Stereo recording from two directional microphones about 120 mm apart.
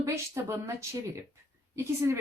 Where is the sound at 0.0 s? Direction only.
25° right (ahead or behind).